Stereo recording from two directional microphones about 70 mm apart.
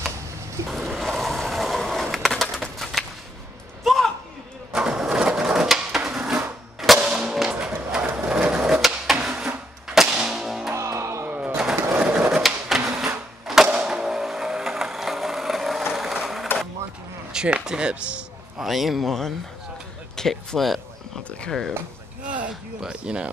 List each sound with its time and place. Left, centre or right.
0.7 s skateboard: centre
2.4 s bird: centre
3.8 s a sound: centre
4.7 s wood: centre
7.0 s music: centre
8.3 s a sound: centre
9.8 s music: centre
10.7 s music: right
11.2 s a sound: right
12.0 s skateboard: centre
12.4 s a sound: centre
17.3 s speech: centre
18.6 s a man's voice: centre
22.5 s speech: centre